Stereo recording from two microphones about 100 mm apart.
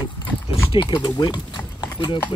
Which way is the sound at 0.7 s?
50° left (ahead or behind).